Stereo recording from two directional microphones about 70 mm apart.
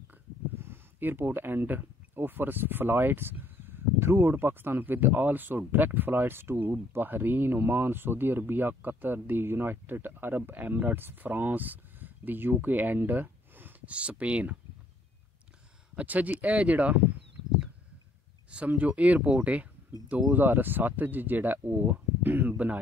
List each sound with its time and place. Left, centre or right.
0.6 s speech: right
16.0 s speech: right
18.5 s speech: centre